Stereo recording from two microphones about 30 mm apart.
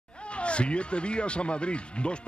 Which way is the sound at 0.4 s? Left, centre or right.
Left.